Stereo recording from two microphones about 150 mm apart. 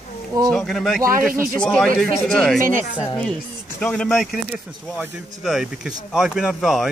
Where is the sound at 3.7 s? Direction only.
5° left (ahead or behind).